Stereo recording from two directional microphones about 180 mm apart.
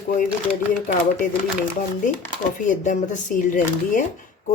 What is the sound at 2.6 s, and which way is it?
Speech, 45° left (ahead or behind).